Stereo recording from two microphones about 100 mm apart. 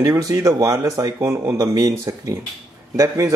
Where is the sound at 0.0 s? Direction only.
35° right (ahead or behind).